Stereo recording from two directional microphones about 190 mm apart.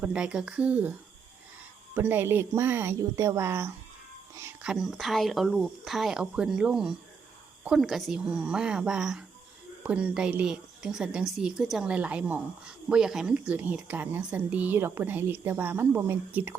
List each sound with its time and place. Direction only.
0.0 s a woman's voice: 5° right (ahead or behind)